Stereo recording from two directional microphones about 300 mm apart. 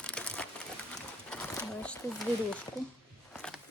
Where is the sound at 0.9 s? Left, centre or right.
Centre.